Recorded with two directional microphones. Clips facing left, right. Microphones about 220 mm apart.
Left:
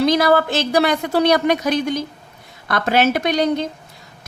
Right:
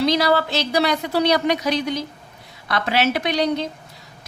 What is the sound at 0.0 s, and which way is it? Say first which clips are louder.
A woman's voice: left 3 dB; 50° left (ahead or behind).